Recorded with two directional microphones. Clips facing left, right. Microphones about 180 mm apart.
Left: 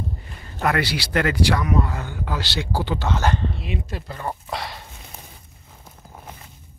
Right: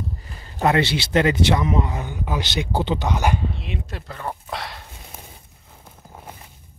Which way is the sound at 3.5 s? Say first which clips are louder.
Left 2 dB; centre (ahead or behind).